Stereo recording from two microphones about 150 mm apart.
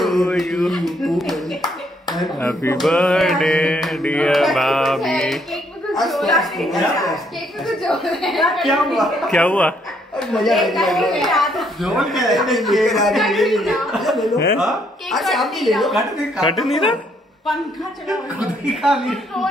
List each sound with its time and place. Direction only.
0.0 s clapping: centre (ahead or behind)
2.4 s speech: 15° left (ahead or behind)
2.8 s a woman's voice: centre (ahead or behind)
18.7 s a woman's voice: centre (ahead or behind)